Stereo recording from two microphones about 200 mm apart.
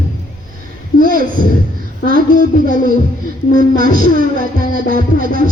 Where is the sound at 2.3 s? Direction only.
40° left (ahead or behind).